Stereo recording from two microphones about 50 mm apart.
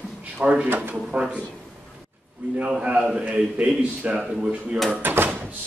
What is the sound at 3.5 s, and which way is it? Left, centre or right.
Speech, right.